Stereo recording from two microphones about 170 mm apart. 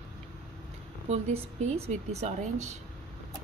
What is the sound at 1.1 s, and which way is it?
A woman's voice, 40° right (ahead or behind).